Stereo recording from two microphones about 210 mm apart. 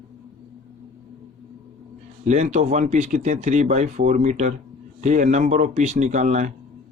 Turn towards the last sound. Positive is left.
turn(degrees=-35)  # may be behind; listen again after turning